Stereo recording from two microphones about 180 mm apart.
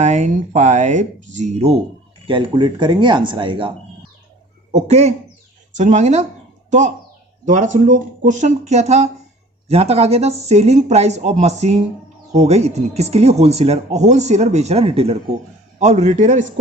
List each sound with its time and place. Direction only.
0.0 s speech: 40° right (ahead or behind)
4.7 s speech: 40° right (ahead or behind)